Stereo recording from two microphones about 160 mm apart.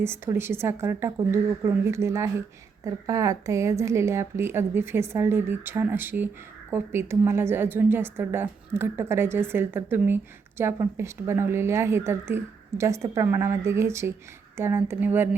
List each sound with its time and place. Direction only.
0.0 s a woman's voice: 15° right (ahead or behind)